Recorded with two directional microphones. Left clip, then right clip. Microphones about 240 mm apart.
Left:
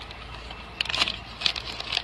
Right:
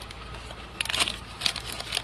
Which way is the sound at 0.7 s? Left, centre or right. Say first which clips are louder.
Left 1 dB; centre.